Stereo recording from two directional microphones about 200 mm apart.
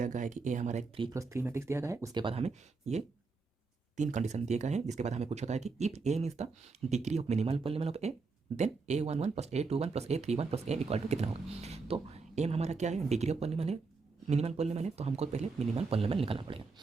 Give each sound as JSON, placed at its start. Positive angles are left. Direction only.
{"t": 0.0, "sound": "speech", "side_deg": -40}
{"t": 1.1, "sound": "speech", "side_deg": -15}
{"t": 2.2, "sound": "speech", "side_deg": -30}